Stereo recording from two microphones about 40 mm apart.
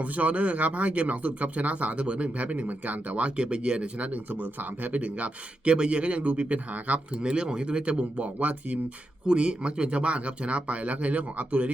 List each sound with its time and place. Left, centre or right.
0.0 s speech: right
7.2 s speech: right
9.2 s speech: right